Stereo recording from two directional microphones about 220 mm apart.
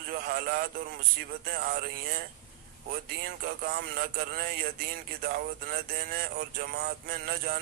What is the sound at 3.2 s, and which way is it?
Speech, 45° right (ahead or behind).